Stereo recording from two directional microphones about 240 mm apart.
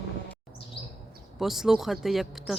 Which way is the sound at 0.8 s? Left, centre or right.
Left.